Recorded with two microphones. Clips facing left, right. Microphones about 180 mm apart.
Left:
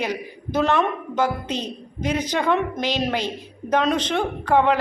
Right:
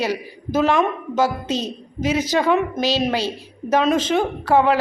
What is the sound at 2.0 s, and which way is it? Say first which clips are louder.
A woman's voice: right 4 dB; 5° right (ahead or behind).